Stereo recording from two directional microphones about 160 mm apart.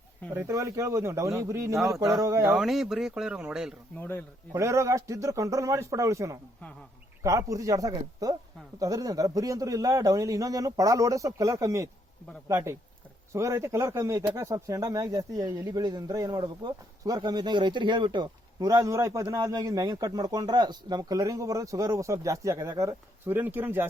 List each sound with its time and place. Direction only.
0.3 s a man's voice: 20° right (ahead or behind)
2.6 s speech: centre (ahead or behind)
3.9 s speech: 10° left (ahead or behind)
4.5 s a man's voice: 20° right (ahead or behind)